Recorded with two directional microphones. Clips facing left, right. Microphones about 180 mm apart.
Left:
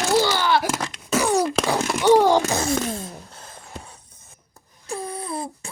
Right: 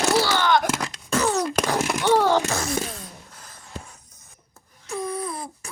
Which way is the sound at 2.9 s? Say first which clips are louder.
Left 7 dB; 25° left (ahead or behind).